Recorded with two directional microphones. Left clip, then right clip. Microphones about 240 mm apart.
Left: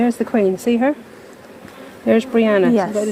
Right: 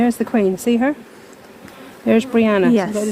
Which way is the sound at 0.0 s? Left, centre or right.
Right.